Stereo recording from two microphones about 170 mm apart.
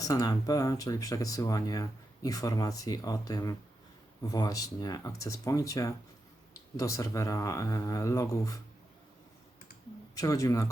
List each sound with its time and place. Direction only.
0.0 s speech: 20° left (ahead or behind)
10.2 s speech: 20° left (ahead or behind)